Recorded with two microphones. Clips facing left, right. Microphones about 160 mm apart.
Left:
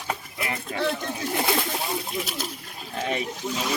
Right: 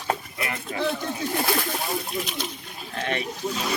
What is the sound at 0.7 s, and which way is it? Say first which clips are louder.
Speech: even; centre (ahead or behind).